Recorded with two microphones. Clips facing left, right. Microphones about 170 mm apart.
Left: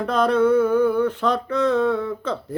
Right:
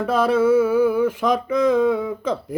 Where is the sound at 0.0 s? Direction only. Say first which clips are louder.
Right 1 dB; 5° right (ahead or behind).